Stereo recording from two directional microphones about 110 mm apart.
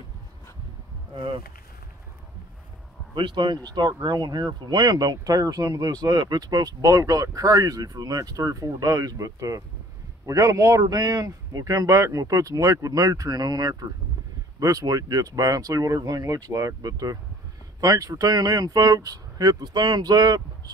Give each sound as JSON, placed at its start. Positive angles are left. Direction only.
{"t": 1.1, "sound": "speech", "side_deg": -50}
{"t": 3.2, "sound": "speech", "side_deg": -45}